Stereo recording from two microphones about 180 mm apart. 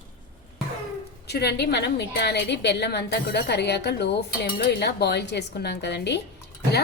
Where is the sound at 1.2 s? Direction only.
65° left (ahead or behind).